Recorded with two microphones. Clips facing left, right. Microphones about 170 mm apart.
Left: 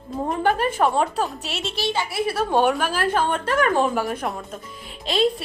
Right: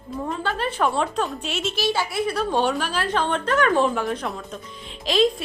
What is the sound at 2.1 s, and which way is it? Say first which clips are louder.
A woman's voice: left 1 dB; 10° left (ahead or behind).